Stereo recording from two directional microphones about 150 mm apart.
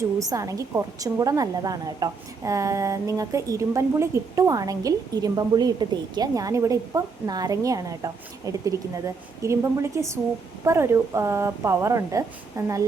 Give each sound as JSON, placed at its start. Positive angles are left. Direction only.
{"t": 0.2, "sound": "a woman's voice", "side_deg": -20}